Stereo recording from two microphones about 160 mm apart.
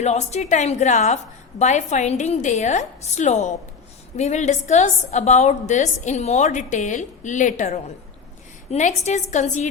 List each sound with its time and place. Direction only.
0.0 s a woman's voice: 45° left (ahead or behind)